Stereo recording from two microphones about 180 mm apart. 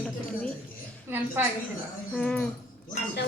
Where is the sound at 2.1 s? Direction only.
5° left (ahead or behind).